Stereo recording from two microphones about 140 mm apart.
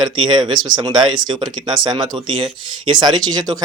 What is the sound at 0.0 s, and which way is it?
A man's voice, 30° right (ahead or behind).